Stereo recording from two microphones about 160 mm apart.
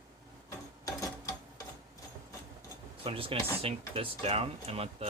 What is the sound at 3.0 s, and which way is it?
Speech, 35° right (ahead or behind).